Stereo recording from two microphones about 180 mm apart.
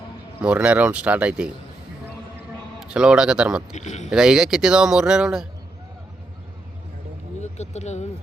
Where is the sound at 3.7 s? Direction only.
40° left (ahead or behind).